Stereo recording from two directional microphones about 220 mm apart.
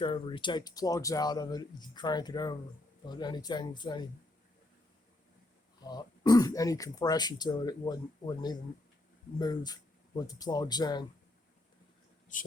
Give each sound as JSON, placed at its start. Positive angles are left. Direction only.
{"t": 0.0, "sound": "speech", "side_deg": 25}
{"t": 5.8, "sound": "speech", "side_deg": 20}
{"t": 12.3, "sound": "speech", "side_deg": 35}